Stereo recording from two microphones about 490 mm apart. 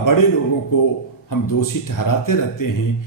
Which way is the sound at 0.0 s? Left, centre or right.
Left.